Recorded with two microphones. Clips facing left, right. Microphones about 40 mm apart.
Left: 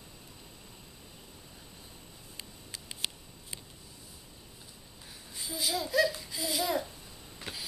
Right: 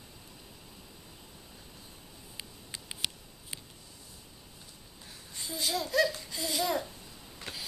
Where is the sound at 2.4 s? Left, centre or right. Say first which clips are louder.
Right 1 dB; right.